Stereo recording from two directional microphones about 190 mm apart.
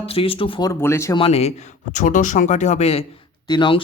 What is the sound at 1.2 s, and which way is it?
Speech, 35° left (ahead or behind).